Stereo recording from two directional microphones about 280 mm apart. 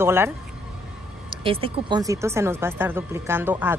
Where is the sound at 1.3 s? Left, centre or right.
Centre.